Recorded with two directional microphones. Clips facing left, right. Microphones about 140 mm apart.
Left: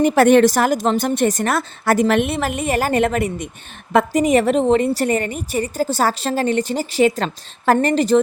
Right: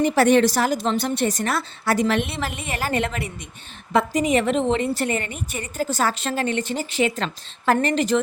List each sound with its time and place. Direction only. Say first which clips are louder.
0.0 s a woman's voice: left 5 dB; 55° left (ahead or behind); by 8.2 s 35° left (ahead or behind)